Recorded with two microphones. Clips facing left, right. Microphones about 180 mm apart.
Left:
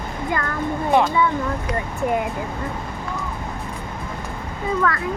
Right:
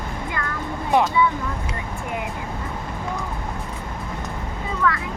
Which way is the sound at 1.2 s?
50° left (ahead or behind).